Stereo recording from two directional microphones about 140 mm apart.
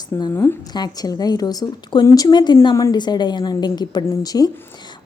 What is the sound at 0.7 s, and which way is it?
A woman's voice, 30° left (ahead or behind).